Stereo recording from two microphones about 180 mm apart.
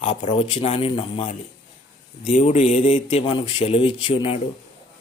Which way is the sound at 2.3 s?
40° left (ahead or behind).